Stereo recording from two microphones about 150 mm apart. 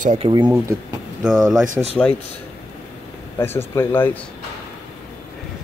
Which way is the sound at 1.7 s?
45° right (ahead or behind).